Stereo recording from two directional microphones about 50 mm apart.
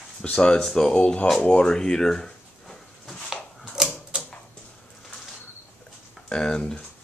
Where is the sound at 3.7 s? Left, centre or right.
Centre.